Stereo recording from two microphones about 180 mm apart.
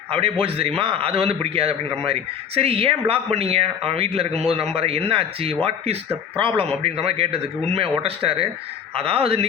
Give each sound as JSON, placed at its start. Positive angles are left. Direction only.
{"t": 0.2, "sound": "a man's voice", "side_deg": -30}